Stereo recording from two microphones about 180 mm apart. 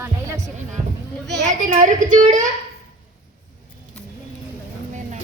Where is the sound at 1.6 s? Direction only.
45° right (ahead or behind).